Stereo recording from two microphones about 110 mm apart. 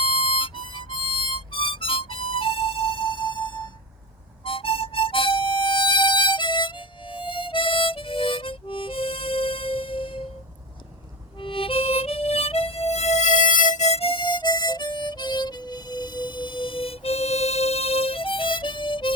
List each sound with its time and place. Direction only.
0.0 s harmonica: 60° left (ahead or behind)
4.4 s harmonica: 55° left (ahead or behind)
11.3 s harmonica: 55° left (ahead or behind)